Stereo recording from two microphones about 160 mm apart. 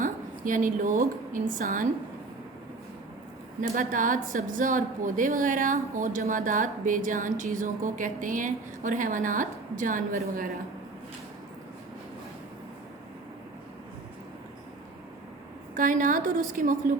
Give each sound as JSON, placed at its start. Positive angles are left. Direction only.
{"t": 0.0, "sound": "a woman's voice", "side_deg": -55}
{"t": 3.6, "sound": "a woman's voice", "side_deg": -55}
{"t": 15.7, "sound": "a woman's voice", "side_deg": -55}